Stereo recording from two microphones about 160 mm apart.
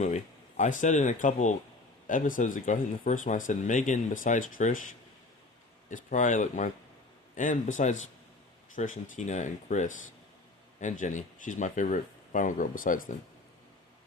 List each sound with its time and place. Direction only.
0.0 s speech: 50° left (ahead or behind)
5.9 s speech: 55° left (ahead or behind)